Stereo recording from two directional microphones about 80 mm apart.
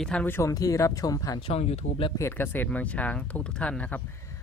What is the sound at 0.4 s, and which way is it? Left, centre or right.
Speech, left.